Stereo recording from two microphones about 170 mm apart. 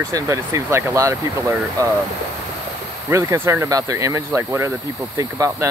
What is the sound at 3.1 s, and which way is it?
Speech, 15° right (ahead or behind).